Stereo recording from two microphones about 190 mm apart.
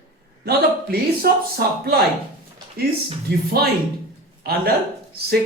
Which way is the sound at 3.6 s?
55° right (ahead or behind).